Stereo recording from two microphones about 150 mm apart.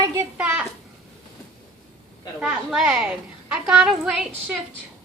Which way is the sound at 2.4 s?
Centre (ahead or behind).